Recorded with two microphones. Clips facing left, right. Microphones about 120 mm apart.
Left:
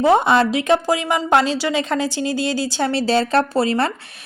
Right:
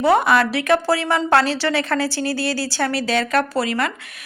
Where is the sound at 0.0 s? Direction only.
25° left (ahead or behind).